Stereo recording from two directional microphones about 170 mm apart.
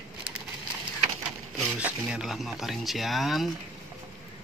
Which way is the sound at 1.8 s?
5° right (ahead or behind).